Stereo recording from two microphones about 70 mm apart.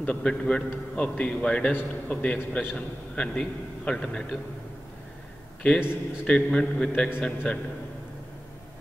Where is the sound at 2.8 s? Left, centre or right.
Centre.